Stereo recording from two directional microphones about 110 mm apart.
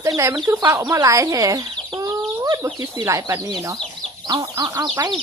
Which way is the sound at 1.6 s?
40° right (ahead or behind).